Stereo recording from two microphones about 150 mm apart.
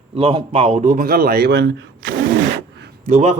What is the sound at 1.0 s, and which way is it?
Speech, 80° right.